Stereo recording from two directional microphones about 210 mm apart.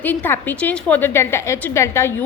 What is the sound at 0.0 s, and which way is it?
A woman's voice, 10° left (ahead or behind).